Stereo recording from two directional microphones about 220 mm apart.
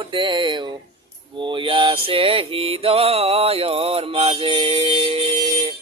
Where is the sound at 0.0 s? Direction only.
20° right (ahead or behind).